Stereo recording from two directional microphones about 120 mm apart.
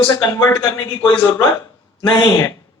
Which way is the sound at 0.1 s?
25° left (ahead or behind).